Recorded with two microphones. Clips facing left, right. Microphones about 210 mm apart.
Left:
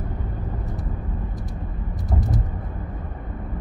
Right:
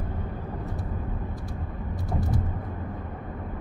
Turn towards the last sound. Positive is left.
turn(degrees=20)  # may be behind; listen again after turning